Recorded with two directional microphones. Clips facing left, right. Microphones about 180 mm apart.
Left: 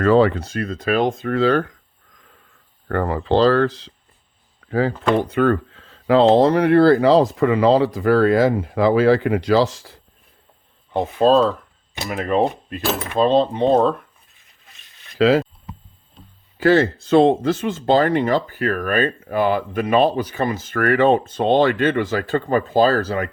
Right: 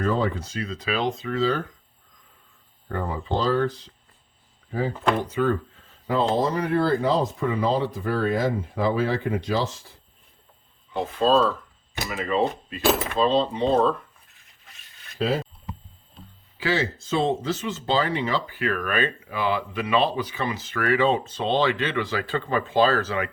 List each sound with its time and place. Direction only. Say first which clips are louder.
0.0 s speech: left 9 dB; 90° left; by 1.7 s 65° left (ahead or behind)
2.9 s speech: left 8 dB; 75° left (ahead or behind)
10.9 s speech: left 5 dB; 60° left (ahead or behind)
15.2 s speech: left 9 dB; 90° left
16.6 s speech: left 10 dB; 55° left (ahead or behind)